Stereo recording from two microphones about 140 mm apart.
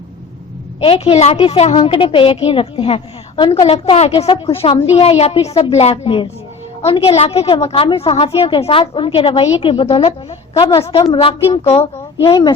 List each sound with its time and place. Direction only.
0.8 s a woman's voice: 45° left (ahead or behind)
4.3 s a woman's voice: 35° left (ahead or behind)
11.2 s a woman's voice: 40° left (ahead or behind)
12.2 s a woman's voice: 30° left (ahead or behind)